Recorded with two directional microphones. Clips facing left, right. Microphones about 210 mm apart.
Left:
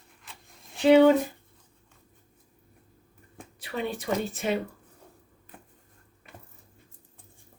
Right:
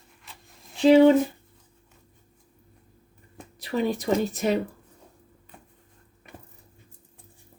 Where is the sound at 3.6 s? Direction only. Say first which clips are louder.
Right 6 dB; 40° right (ahead or behind).